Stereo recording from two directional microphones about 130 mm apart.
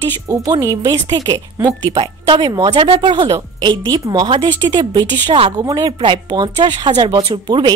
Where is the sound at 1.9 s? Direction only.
40° right (ahead or behind).